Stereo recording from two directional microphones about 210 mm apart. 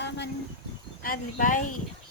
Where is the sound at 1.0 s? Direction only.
40° left (ahead or behind).